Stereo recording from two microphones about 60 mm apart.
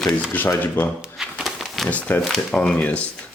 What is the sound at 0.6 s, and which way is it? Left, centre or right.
Speech, left.